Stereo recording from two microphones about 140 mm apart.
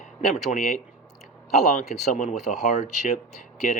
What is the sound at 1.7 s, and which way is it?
Speech, 65° left (ahead or behind).